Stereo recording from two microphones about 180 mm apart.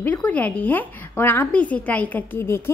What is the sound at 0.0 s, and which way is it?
A woman's voice, 10° left (ahead or behind).